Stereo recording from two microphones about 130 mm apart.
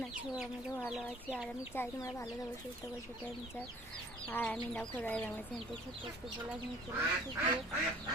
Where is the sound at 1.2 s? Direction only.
10° right (ahead or behind).